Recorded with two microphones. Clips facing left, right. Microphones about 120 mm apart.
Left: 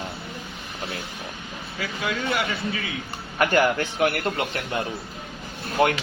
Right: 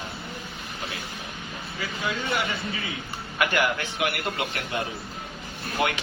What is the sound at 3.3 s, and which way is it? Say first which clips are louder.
Speech: left 5 dB; 40° left (ahead or behind).